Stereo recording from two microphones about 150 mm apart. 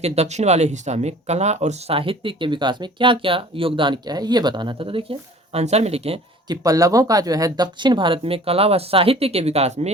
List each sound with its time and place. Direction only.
0.0 s speech: 45° right (ahead or behind)
6.5 s speech: 25° right (ahead or behind); by 9.9 s 45° right (ahead or behind)